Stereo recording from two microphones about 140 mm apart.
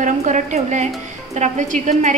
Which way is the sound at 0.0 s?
65° right (ahead or behind).